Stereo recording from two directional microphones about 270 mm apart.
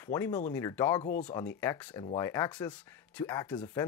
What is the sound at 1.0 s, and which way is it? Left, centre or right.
Speech, left.